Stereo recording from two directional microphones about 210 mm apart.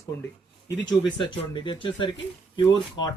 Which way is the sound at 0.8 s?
20° left (ahead or behind).